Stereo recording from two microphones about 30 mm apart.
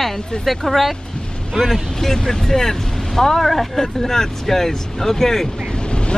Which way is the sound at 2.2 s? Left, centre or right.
Centre.